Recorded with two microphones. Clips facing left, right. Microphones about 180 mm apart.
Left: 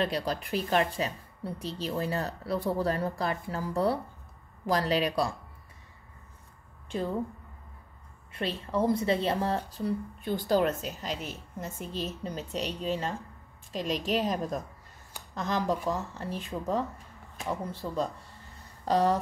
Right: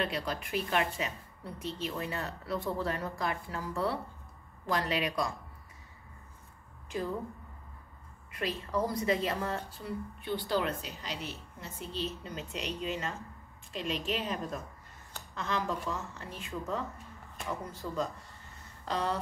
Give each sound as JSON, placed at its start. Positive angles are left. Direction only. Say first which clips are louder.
{"t": 0.0, "sound": "a woman's voice", "louder": "left 4 dB", "side_deg": 35}
{"t": 8.3, "sound": "a woman's voice", "louder": "left 2 dB", "side_deg": 30}
{"t": 18.9, "sound": "a woman's voice", "louder": "left 8 dB", "side_deg": 40}